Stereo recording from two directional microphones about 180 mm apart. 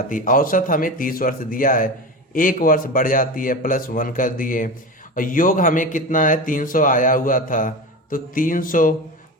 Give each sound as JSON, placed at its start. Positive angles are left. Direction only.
{"t": 0.1, "sound": "a man's voice", "side_deg": 50}